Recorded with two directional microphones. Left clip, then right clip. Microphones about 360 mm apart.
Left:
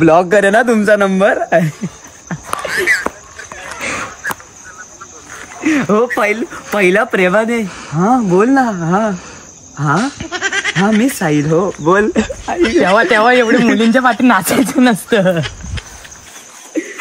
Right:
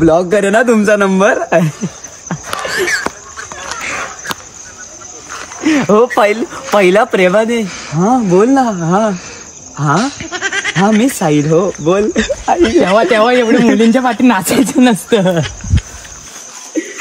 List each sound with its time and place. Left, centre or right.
0.0 s a man's voice: left
0.3 s speech: centre
2.2 s a sound: centre
5.6 s speech: centre